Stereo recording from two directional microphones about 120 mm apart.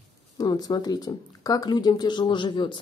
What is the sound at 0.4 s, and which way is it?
Speech, 35° left (ahead or behind).